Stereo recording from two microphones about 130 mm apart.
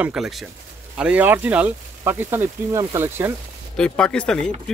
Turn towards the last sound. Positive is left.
turn(degrees=5)  # may be behind; listen again after turning